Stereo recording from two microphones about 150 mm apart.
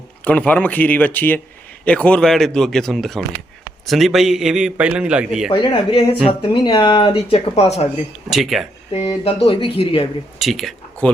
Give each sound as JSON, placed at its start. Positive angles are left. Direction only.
{"t": 0.3, "sound": "a man's voice", "side_deg": 10}
{"t": 5.5, "sound": "speech", "side_deg": 35}
{"t": 8.3, "sound": "a man's voice", "side_deg": 0}
{"t": 8.9, "sound": "speech", "side_deg": 40}
{"t": 10.3, "sound": "speech", "side_deg": 0}